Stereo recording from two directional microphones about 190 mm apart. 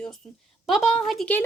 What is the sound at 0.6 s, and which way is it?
Speech, centre (ahead or behind).